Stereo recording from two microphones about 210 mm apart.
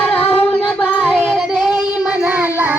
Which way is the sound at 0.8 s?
5° right (ahead or behind).